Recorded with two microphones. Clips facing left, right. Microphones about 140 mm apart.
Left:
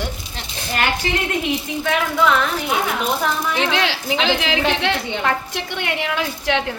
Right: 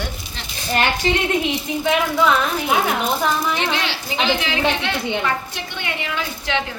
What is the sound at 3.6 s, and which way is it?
Speech, 90° left.